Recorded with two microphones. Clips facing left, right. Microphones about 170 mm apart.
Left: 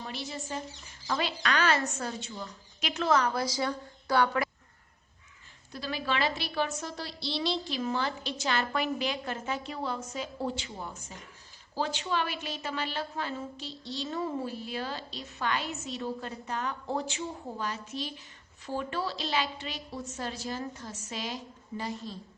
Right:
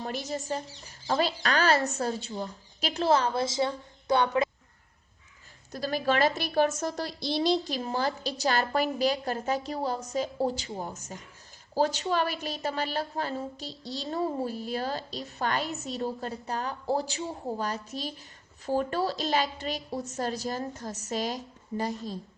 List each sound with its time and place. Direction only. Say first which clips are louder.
0.0 s a woman's voice: right 5 dB; 45° right (ahead or behind); by 4.4 s 20° right (ahead or behind)
5.7 s a woman's voice: right 6 dB; 45° right (ahead or behind)